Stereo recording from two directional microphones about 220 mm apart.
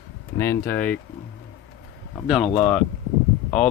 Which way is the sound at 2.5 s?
5° left (ahead or behind).